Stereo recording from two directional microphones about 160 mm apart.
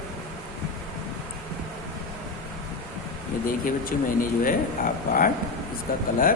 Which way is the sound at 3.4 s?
60° left (ahead or behind).